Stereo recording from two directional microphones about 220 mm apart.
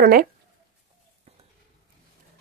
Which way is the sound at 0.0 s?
40° right (ahead or behind).